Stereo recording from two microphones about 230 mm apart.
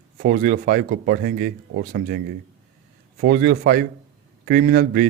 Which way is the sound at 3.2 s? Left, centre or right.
Right.